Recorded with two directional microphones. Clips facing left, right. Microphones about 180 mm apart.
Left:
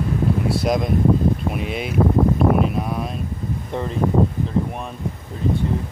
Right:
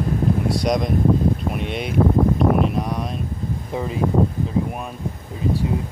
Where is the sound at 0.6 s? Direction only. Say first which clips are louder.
Even; 5° left (ahead or behind).